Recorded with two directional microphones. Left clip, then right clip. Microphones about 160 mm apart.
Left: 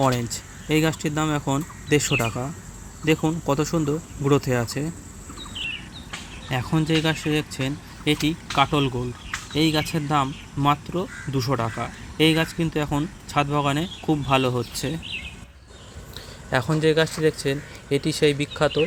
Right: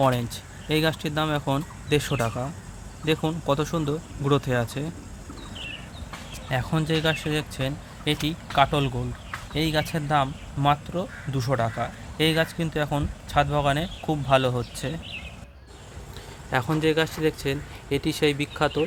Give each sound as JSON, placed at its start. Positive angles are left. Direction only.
{"t": 0.0, "sound": "speech", "side_deg": 10}
{"t": 6.5, "sound": "speech", "side_deg": 10}
{"t": 16.5, "sound": "speech", "side_deg": 20}